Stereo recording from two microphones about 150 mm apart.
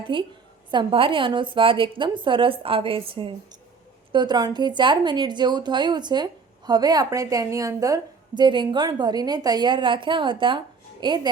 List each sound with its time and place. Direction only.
0.1 s a woman's voice: 30° right (ahead or behind)